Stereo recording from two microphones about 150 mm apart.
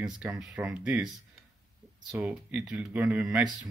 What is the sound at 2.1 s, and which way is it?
Speech, 10° right (ahead or behind).